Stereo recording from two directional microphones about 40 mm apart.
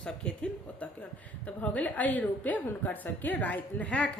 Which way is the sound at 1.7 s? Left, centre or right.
Left.